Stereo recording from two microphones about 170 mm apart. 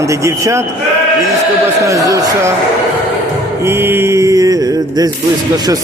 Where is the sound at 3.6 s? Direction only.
15° right (ahead or behind).